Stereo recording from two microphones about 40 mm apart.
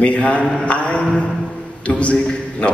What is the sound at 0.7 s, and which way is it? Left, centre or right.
A man's voice, left.